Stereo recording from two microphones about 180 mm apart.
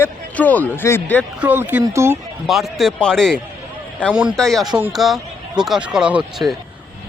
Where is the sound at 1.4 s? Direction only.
10° right (ahead or behind).